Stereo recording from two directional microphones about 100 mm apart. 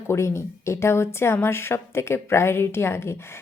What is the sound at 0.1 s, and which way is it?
A woman's voice, 30° left (ahead or behind).